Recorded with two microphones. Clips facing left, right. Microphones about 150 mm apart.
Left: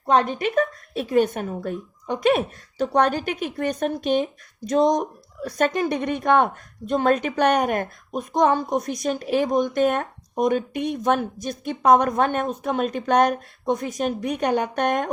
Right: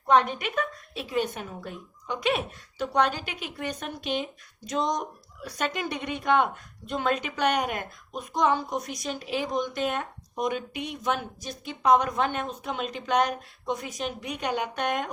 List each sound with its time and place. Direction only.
0.1 s speech: 35° left (ahead or behind)
0.9 s speech: 50° left (ahead or behind)